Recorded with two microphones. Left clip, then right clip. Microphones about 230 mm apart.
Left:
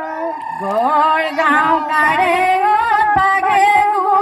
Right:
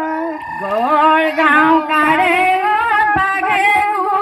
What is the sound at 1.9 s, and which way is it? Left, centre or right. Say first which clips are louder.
Singing: right 1 dB; right.